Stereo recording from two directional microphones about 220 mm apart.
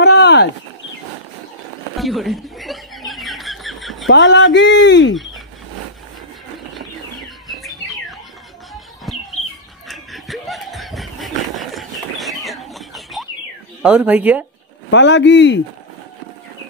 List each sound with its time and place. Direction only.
0.0 s a sound: 50° left (ahead or behind)
2.0 s chuckle: centre (ahead or behind)
4.1 s speech: 55° left (ahead or behind)
5.1 s bird: centre (ahead or behind)
7.4 s music: centre (ahead or behind)
9.1 s a sound: centre (ahead or behind)
9.8 s snicker: centre (ahead or behind)
13.8 s speech: 5° right (ahead or behind)
14.9 s a man's voice: 55° left (ahead or behind)